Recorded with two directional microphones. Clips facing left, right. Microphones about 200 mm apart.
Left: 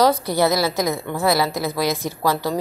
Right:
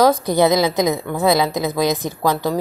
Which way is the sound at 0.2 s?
15° right (ahead or behind).